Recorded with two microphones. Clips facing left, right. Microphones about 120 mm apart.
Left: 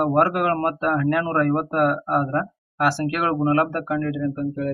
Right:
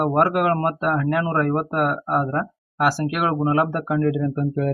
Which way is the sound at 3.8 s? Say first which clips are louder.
Right 3 dB; 25° right (ahead or behind).